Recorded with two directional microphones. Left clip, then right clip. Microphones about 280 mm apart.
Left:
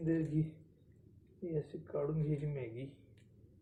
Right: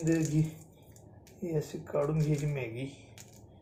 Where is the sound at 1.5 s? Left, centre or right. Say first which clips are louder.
Right 7 dB; right.